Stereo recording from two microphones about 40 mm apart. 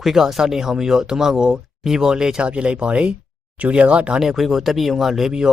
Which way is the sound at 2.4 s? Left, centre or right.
Right.